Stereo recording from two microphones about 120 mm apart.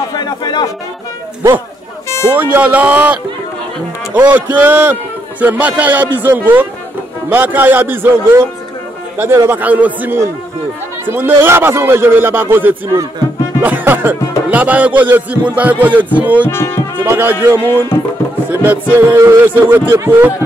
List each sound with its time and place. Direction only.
0.1 s speech: 35° left (ahead or behind)
2.0 s a sound: 25° left (ahead or behind)
2.3 s speech: 15° right (ahead or behind)
16.4 s music: 20° left (ahead or behind)
17.0 s speech: 15° right (ahead or behind)